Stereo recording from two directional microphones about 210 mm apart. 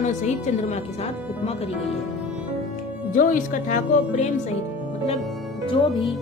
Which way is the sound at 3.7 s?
35° left (ahead or behind).